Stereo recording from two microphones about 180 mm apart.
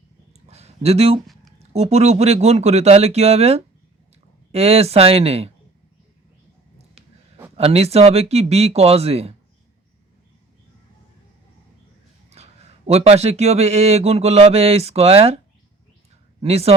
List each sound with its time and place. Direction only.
0.4 s a sound: 35° right (ahead or behind)
1.7 s a man's voice: 35° right (ahead or behind)
7.5 s a man's voice: 35° right (ahead or behind)
12.3 s a man's voice: 35° right (ahead or behind)
16.4 s a man's voice: 35° right (ahead or behind)